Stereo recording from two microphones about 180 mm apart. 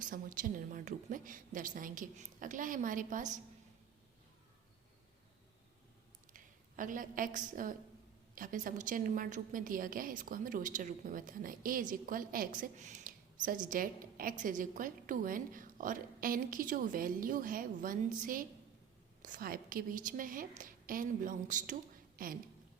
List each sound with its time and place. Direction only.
0.0 s a woman's voice: 50° right (ahead or behind)
6.3 s a woman's voice: 45° right (ahead or behind)